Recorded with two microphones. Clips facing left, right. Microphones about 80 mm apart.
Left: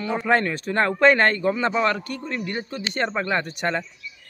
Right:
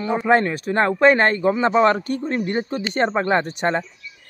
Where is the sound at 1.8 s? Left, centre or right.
Right.